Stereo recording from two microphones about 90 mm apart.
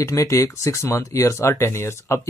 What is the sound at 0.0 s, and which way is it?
Speech, 35° left (ahead or behind).